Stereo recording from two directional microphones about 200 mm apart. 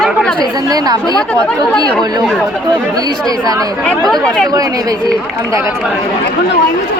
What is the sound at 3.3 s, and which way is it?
Speech, 20° right (ahead or behind).